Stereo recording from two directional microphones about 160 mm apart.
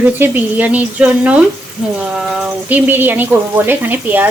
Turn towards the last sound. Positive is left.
turn(degrees=-10)  # may be behind; listen again after turning